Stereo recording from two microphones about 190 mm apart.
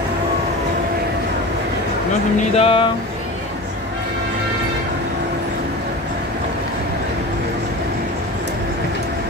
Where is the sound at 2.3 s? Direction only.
30° left (ahead or behind).